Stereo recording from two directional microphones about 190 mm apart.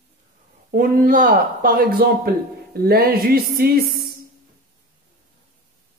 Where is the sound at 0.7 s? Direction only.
45° right (ahead or behind).